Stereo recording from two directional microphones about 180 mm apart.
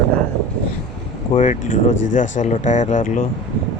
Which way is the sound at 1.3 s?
40° left (ahead or behind).